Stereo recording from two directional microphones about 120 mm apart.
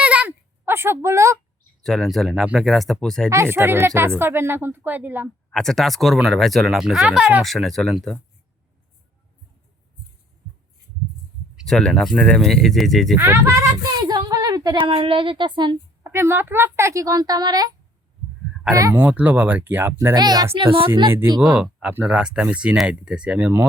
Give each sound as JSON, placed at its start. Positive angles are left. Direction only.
{"t": 0.0, "sound": "a sound", "side_deg": -10}
{"t": 1.8, "sound": "speech", "side_deg": 5}
{"t": 3.2, "sound": "speech", "side_deg": -20}
{"t": 5.5, "sound": "speech", "side_deg": 5}
{"t": 11.5, "sound": "speech", "side_deg": 5}
{"t": 13.1, "sound": "speech", "side_deg": -20}
{"t": 14.0, "sound": "a woman's voice", "side_deg": -35}
{"t": 16.0, "sound": "speech", "side_deg": -20}
{"t": 18.9, "sound": "speech", "side_deg": -15}
{"t": 20.1, "sound": "speech", "side_deg": -35}
{"t": 20.6, "sound": "a woman's voice", "side_deg": -50}
{"t": 21.2, "sound": "speech", "side_deg": -35}
{"t": 21.5, "sound": "speech", "side_deg": -10}